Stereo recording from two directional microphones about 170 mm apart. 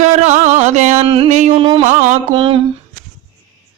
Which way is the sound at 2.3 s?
30° right (ahead or behind).